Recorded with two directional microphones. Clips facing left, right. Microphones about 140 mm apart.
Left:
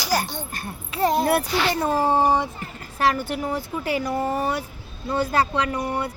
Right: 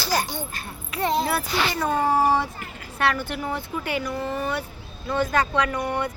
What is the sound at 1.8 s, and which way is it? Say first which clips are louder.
Speech: even; 30° left (ahead or behind).